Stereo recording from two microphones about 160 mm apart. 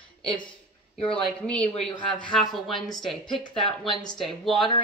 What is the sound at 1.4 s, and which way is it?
A man's voice, 5° left (ahead or behind).